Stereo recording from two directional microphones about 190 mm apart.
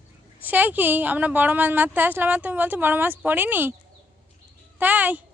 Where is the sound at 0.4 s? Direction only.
10° right (ahead or behind).